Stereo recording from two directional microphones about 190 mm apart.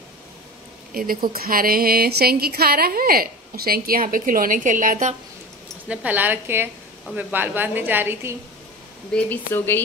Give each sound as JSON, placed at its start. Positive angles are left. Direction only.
{"t": 0.9, "sound": "a woman's voice", "side_deg": -50}
{"t": 5.9, "sound": "a woman's voice", "side_deg": -10}
{"t": 9.1, "sound": "speech", "side_deg": 10}